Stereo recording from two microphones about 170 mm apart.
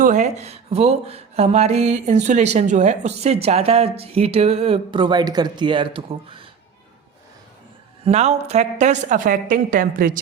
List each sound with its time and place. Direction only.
0.0 s speech: 45° right (ahead or behind)
8.0 s a woman's voice: 40° right (ahead or behind)